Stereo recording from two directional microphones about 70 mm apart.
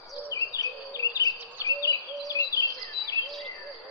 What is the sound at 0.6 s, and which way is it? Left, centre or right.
Insect, left.